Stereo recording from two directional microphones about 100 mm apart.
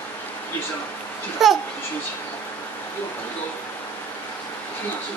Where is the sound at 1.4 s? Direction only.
5° right (ahead or behind).